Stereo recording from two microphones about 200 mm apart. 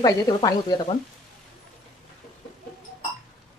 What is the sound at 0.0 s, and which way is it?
Speech, 20° left (ahead or behind).